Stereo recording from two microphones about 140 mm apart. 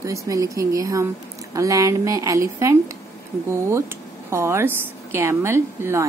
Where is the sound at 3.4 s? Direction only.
20° right (ahead or behind).